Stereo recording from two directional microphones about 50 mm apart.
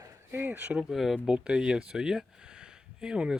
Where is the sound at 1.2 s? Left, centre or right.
Centre.